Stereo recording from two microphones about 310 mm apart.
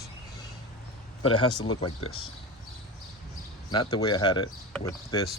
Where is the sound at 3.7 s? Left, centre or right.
Centre.